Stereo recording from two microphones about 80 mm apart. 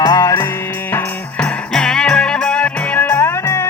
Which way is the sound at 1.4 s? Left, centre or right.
Centre.